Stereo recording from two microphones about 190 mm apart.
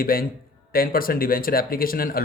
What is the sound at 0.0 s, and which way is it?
Speech, 50° left (ahead or behind).